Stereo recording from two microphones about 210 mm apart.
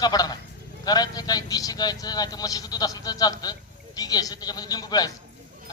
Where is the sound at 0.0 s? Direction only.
20° left (ahead or behind).